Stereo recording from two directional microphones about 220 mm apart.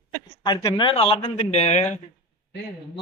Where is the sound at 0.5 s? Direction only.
15° left (ahead or behind).